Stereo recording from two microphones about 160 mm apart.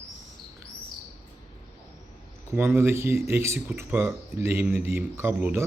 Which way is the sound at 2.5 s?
15° right (ahead or behind).